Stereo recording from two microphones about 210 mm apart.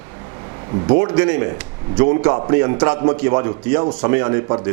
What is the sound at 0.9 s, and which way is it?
A man's voice, 25° right (ahead or behind).